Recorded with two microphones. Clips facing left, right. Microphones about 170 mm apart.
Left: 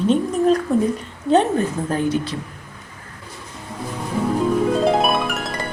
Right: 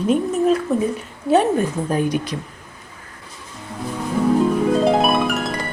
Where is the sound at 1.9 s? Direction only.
15° right (ahead or behind).